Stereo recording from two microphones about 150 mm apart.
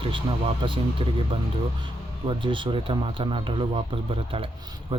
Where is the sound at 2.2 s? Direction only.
35° right (ahead or behind).